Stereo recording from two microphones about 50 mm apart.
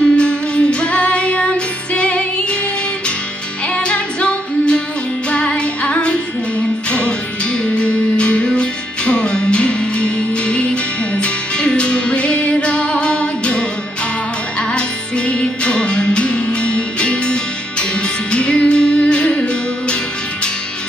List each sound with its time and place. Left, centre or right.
0.1 s music: left
3.7 s music: left
14.7 s music: left